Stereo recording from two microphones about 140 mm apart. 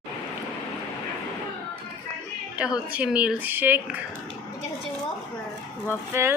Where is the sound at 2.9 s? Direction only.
10° right (ahead or behind).